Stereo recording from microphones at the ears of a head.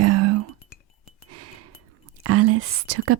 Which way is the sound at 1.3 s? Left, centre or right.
Right.